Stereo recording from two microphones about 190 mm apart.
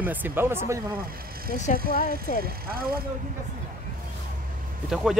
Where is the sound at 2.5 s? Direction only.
50° right (ahead or behind).